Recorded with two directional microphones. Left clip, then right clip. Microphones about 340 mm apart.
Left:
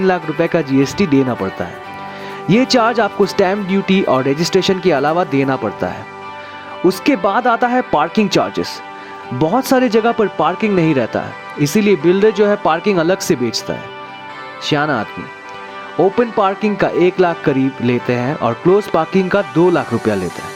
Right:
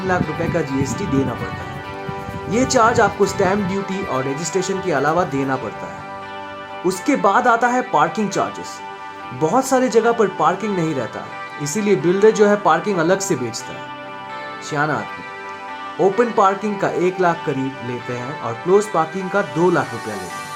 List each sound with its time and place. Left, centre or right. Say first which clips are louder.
0.1 s speech: left 5 dB; left
2.5 s speech: left 2 dB; left
6.8 s speech: left 3 dB; left
14.7 s speech: left 5 dB; left
16.1 s speech: left 1 dB; left